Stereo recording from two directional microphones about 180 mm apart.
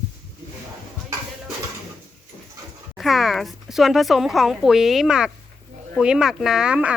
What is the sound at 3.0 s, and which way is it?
Speech, centre (ahead or behind).